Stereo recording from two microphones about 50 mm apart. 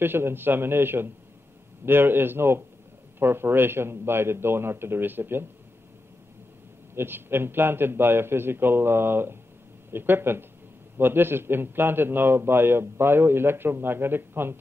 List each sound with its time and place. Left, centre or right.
0.0 s a man's voice: right
7.0 s a man's voice: right